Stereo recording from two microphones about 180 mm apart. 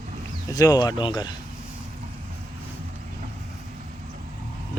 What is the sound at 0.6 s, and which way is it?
Speech, 20° left (ahead or behind).